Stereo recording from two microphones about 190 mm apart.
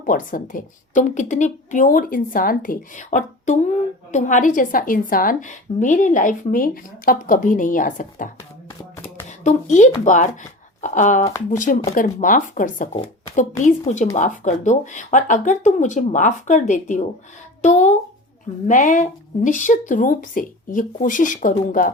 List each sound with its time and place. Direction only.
0.0 s a woman's voice: 45° left (ahead or behind)
9.4 s a woman's voice: 40° left (ahead or behind)